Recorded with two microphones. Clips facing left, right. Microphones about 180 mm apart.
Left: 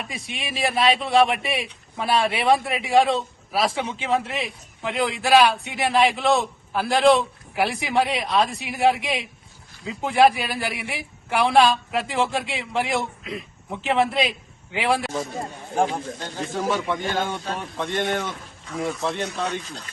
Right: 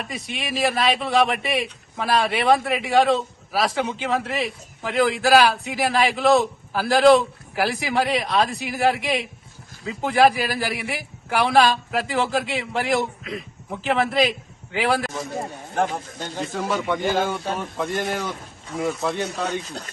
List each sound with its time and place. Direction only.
0.3 s a man's voice: centre (ahead or behind)
16.5 s a man's voice: centre (ahead or behind)
19.6 s speech: 40° right (ahead or behind)